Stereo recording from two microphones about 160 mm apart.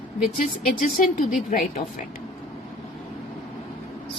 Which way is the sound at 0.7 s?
60° left (ahead or behind).